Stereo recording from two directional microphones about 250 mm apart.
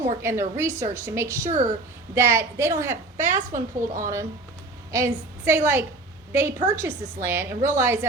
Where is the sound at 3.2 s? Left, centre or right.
Right.